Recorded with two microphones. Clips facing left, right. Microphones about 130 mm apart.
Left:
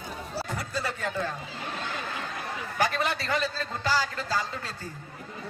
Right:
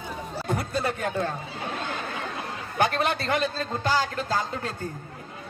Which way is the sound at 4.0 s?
50° right (ahead or behind).